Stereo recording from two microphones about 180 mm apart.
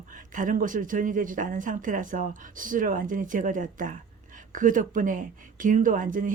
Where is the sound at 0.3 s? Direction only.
50° right (ahead or behind).